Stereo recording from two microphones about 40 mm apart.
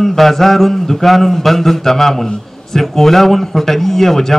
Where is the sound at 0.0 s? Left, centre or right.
Centre.